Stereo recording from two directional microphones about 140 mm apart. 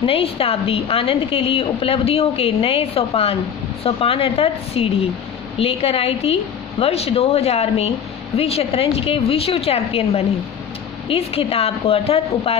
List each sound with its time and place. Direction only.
0.0 s a woman's voice: 40° left (ahead or behind)